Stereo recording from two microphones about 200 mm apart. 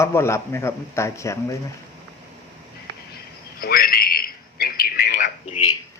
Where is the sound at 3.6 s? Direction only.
50° left (ahead or behind).